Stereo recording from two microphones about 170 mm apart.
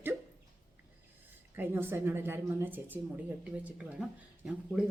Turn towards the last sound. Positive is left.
turn(degrees=-5)  # may be behind; listen again after turning